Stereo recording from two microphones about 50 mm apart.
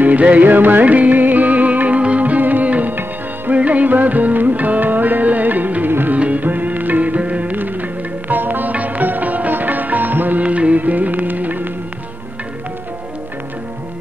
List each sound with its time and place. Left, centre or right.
0.0 s music: right
6.1 s music: right
7.5 s music: right